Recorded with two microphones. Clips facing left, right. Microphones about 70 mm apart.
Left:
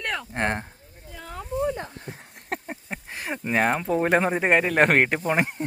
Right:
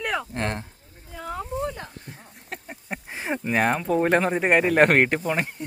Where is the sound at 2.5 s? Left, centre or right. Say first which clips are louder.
Left 6 dB; left.